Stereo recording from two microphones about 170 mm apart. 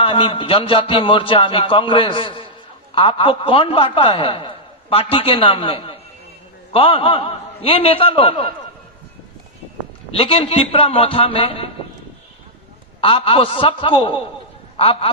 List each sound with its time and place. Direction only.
0.0 s a man's voice: 30° left (ahead or behind)
10.2 s a man's voice: 35° left (ahead or behind)
13.0 s a man's voice: 35° left (ahead or behind)